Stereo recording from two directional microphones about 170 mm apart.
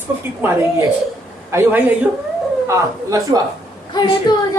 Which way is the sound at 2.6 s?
20° right (ahead or behind).